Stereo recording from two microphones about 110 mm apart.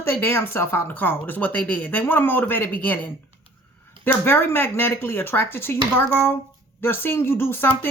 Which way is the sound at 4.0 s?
15° left (ahead or behind).